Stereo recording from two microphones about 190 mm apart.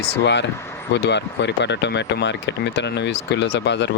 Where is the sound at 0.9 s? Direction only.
65° left (ahead or behind).